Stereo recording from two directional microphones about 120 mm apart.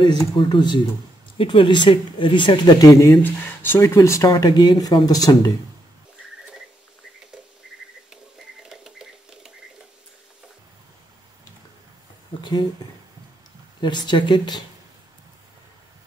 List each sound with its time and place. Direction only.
0.0 s speech: 40° left (ahead or behind)
3.2 s speech: 20° left (ahead or behind)
8.6 s a sound: 5° right (ahead or behind)
12.4 s speech: 35° left (ahead or behind)
13.7 s speech: 40° left (ahead or behind)